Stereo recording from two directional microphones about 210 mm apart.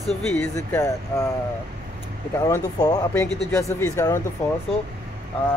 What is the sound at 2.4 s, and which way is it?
Speech, 20° left (ahead or behind).